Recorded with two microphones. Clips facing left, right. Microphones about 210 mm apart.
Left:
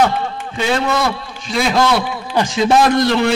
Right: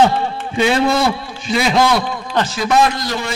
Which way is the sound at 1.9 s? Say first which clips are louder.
Left 1 dB; 10° left (ahead or behind).